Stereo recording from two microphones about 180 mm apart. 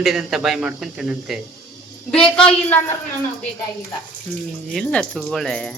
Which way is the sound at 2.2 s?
30° left (ahead or behind).